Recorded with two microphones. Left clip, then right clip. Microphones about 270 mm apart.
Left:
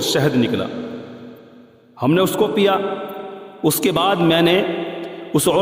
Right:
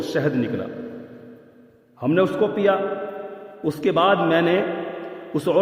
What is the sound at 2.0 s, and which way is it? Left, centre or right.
A man's voice, left.